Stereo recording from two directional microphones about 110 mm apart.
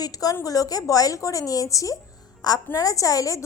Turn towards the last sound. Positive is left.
turn(degrees=30)  # may be behind; listen again after turning